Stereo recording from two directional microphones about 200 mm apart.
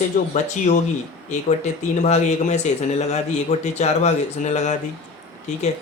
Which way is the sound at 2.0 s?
35° left (ahead or behind).